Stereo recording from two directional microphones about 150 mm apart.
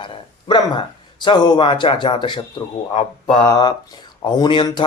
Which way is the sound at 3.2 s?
30° left (ahead or behind).